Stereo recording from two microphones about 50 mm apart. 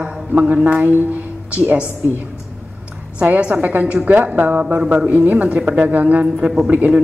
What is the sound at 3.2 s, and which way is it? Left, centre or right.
Speech, right.